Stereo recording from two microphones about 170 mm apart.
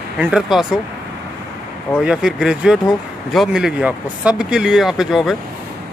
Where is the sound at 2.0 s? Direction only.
5° right (ahead or behind).